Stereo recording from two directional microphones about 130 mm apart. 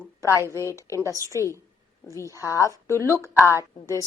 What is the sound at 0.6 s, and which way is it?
Speech, 20° right (ahead or behind).